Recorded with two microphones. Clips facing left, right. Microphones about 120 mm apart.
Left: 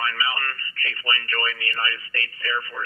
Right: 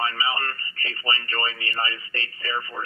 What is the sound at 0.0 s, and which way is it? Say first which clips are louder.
Speech: right 1 dB; 25° right (ahead or behind).